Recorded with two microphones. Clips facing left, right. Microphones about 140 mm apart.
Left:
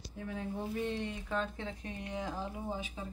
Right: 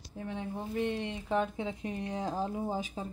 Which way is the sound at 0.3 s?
20° right (ahead or behind).